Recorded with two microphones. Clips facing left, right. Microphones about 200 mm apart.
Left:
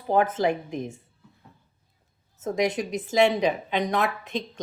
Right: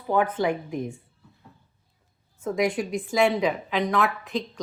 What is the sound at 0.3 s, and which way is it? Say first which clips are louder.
Speech: left 1 dB; 20° left (ahead or behind).